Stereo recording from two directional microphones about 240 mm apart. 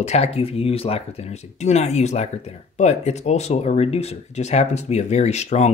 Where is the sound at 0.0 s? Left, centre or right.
Left.